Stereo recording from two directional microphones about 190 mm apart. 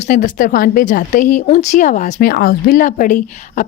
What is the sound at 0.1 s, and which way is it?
A woman's voice, 45° left (ahead or behind).